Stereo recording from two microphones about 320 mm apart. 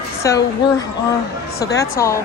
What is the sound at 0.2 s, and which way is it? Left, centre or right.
Speech, centre.